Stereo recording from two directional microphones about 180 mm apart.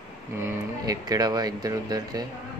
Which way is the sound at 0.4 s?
15° right (ahead or behind).